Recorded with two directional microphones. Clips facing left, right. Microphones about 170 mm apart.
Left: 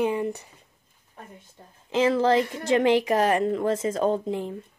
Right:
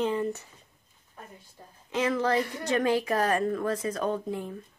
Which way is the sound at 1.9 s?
25° left (ahead or behind).